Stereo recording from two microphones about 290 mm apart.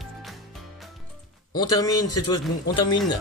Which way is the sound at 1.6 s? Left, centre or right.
Centre.